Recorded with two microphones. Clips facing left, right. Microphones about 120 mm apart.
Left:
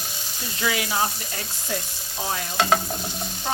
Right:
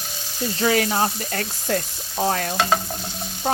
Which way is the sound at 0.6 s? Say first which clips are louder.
Right 5 dB; 40° right (ahead or behind).